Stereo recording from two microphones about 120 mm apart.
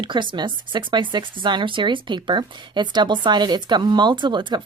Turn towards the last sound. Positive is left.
turn(degrees=-40)  # may be behind; listen again after turning